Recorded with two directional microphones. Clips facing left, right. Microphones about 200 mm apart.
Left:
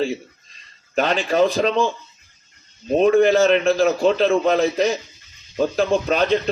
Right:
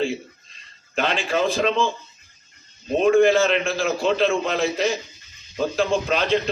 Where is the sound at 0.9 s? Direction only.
40° left (ahead or behind).